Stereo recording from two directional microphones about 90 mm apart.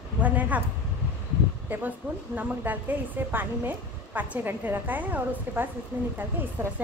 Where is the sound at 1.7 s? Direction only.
20° right (ahead or behind).